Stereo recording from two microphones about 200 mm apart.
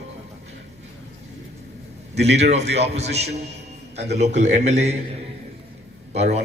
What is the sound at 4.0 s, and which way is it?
A man's voice, 35° right (ahead or behind).